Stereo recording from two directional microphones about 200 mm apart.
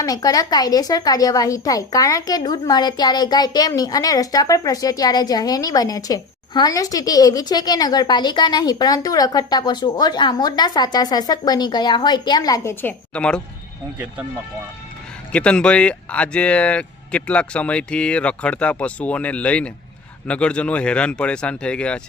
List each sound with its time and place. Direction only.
0.0 s a woman's voice: 20° left (ahead or behind)
15.3 s speech: 5° left (ahead or behind)